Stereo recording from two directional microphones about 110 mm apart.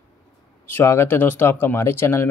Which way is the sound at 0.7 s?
20° left (ahead or behind).